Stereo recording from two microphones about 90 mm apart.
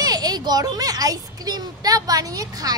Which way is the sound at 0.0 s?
45° right (ahead or behind).